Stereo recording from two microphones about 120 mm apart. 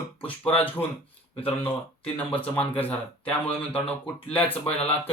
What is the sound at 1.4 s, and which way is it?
Speech, 50° left (ahead or behind).